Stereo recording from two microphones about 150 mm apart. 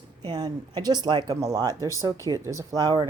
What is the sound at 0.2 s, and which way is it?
Speech, 25° right (ahead or behind).